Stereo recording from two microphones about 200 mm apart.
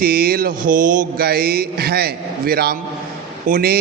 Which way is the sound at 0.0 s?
50° right (ahead or behind).